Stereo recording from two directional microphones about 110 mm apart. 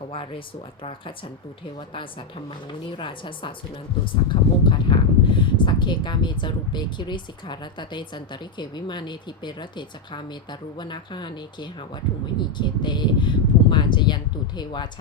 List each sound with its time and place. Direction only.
0.1 s speech: 55° left (ahead or behind)